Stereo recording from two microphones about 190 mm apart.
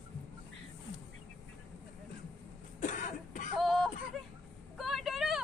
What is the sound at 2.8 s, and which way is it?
Cough, 45° left (ahead or behind).